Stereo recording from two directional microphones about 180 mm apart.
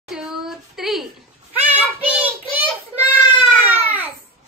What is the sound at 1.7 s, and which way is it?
Child singing, 10° right (ahead or behind).